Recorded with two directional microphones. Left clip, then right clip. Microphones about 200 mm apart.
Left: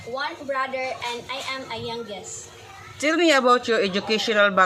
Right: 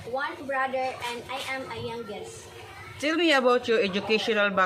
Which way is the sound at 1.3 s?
5° right (ahead or behind).